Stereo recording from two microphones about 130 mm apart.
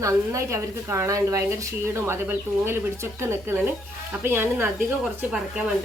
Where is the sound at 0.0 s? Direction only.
20° right (ahead or behind).